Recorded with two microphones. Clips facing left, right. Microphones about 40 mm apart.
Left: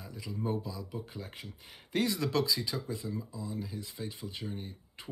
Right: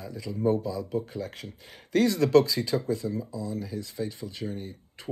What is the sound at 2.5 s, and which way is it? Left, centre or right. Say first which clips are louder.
Speech: right 6 dB; right.